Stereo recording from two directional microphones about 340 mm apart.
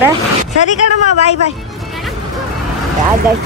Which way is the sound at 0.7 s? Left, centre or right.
Centre.